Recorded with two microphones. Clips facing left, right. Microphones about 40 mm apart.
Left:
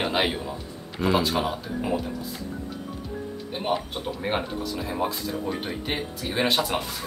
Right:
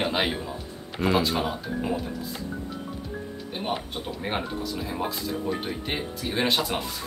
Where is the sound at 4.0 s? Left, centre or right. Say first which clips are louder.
Left 2 dB; centre.